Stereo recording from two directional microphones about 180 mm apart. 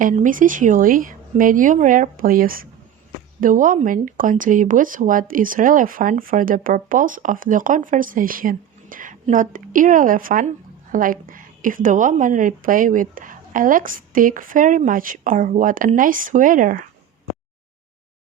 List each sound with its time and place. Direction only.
0.0 s speech: 45° right (ahead or behind)